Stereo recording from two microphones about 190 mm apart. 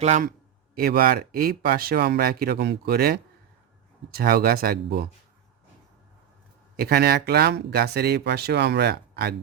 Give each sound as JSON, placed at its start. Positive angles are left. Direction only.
{"t": 0.0, "sound": "a man's voice", "side_deg": -40}
{"t": 0.8, "sound": "speech", "side_deg": -50}
{"t": 6.7, "sound": "speech", "side_deg": -55}